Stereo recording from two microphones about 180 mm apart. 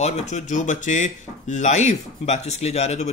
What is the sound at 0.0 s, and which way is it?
Speech, 40° left (ahead or behind).